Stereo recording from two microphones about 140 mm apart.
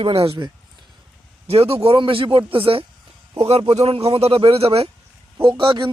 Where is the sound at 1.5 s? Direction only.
45° right (ahead or behind).